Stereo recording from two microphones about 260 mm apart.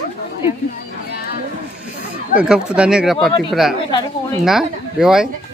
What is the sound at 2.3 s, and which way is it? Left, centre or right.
Speech, centre.